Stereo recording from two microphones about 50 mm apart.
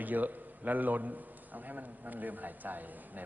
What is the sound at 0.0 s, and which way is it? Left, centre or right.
A man's voice, right.